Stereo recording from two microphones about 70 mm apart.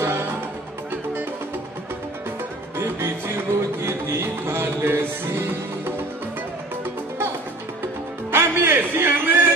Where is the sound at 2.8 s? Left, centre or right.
Right.